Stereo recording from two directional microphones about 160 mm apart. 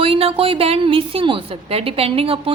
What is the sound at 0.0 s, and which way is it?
A woman's voice, 35° right (ahead or behind).